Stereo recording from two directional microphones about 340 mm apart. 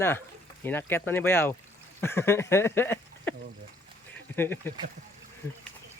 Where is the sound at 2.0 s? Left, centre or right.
Centre.